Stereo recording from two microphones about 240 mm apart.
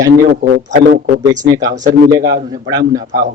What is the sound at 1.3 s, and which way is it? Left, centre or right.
Speech, centre.